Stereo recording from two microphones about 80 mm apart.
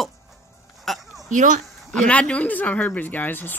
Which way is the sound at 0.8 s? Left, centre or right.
Centre.